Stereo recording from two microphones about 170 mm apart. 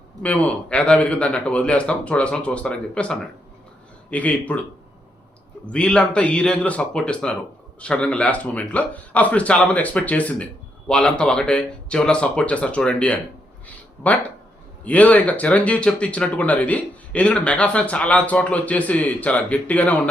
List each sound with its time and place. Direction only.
0.2 s speech: 10° left (ahead or behind)
5.7 s speech: 5° left (ahead or behind)
14.8 s speech: 10° left (ahead or behind)